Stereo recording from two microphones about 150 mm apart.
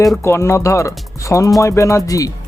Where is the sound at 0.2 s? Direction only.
20° left (ahead or behind).